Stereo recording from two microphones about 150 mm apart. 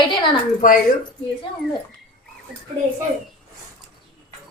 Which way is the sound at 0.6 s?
60° left (ahead or behind).